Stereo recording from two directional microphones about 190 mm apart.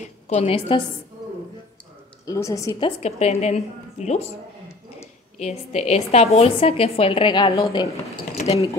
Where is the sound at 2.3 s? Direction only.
15° left (ahead or behind).